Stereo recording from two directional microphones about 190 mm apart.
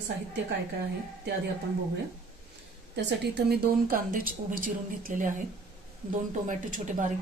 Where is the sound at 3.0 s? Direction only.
60° right (ahead or behind).